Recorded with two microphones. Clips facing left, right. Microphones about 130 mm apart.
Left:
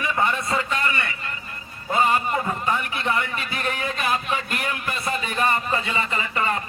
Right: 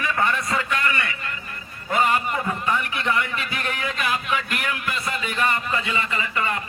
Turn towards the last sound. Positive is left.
turn(degrees=30)  # may be behind; listen again after turning